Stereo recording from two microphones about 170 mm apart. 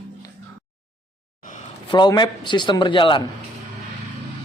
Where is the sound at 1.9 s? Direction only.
25° left (ahead or behind).